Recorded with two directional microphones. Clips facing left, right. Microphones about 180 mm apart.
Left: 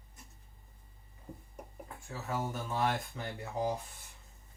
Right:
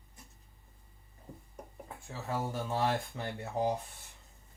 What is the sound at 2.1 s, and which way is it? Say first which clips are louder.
Speech: right 1 dB; 30° right (ahead or behind).